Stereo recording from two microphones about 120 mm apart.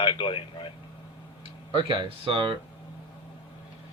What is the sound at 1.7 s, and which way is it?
Speech, 45° right (ahead or behind).